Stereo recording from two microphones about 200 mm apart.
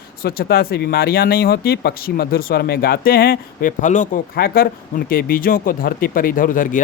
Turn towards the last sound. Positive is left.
turn(degrees=40)  # may be behind; listen again after turning